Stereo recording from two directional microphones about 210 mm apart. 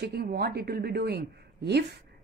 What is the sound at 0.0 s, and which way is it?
Speech, 50° right (ahead or behind).